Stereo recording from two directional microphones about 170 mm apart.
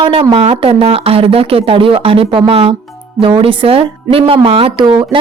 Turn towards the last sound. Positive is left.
turn(degrees=-25)  # may be behind; listen again after turning